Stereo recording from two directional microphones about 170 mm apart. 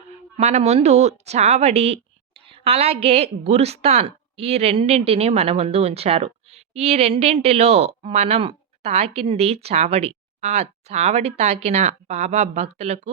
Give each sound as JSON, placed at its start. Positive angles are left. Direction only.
{"t": 0.3, "sound": "a woman's voice", "side_deg": -40}